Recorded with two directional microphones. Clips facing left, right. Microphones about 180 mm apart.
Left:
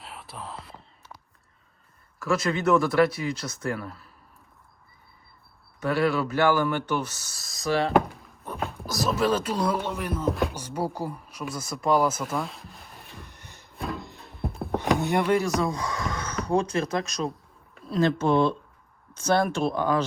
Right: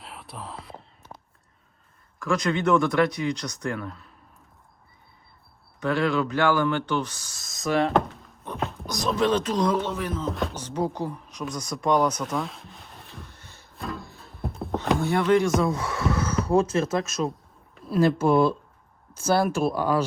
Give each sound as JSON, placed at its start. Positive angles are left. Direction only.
{"t": 0.0, "sound": "whispering", "side_deg": 0}
{"t": 2.1, "sound": "speech", "side_deg": 5}
{"t": 5.8, "sound": "speech", "side_deg": 5}
{"t": 13.2, "sound": "music", "side_deg": 15}
{"t": 13.7, "sound": "a sound", "side_deg": 0}
{"t": 14.9, "sound": "speech", "side_deg": 15}